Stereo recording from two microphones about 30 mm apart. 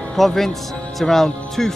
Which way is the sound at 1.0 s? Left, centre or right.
Centre.